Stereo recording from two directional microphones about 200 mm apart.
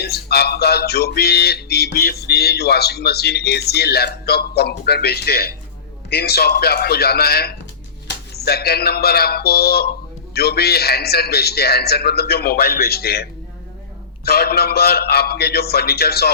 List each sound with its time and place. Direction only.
0.0 s speech: 55° left (ahead or behind)
8.0 s a sound: 55° left (ahead or behind)
10.3 s speech: 50° left (ahead or behind)
14.3 s speech: 55° left (ahead or behind)